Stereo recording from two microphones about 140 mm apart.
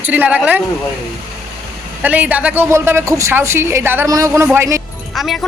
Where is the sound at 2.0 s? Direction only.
10° right (ahead or behind).